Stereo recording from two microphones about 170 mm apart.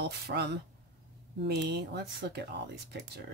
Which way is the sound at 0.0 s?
85° right.